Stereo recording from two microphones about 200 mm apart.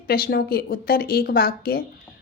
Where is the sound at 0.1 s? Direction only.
50° left (ahead or behind).